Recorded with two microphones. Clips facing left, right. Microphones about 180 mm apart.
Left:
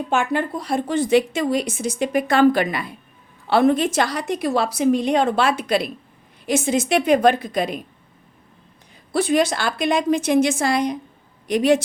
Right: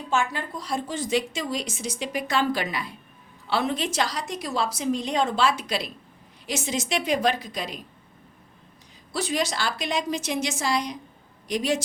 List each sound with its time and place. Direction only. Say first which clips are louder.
0.1 s a woman's voice: left 4 dB; 60° left (ahead or behind)
9.1 s a woman's voice: left 8 dB; 55° left (ahead or behind)